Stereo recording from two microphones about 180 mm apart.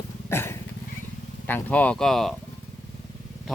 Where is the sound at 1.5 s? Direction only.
10° left (ahead or behind).